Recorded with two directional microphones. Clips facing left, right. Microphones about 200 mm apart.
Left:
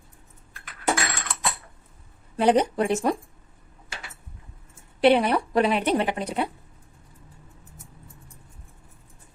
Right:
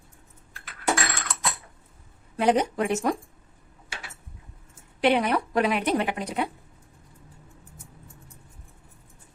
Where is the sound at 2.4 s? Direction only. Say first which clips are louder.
Left 2 dB; 30° left (ahead or behind).